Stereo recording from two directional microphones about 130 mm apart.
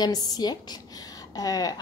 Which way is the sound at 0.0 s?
30° left (ahead or behind).